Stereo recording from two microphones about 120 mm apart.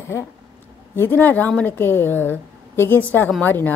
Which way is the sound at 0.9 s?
15° left (ahead or behind).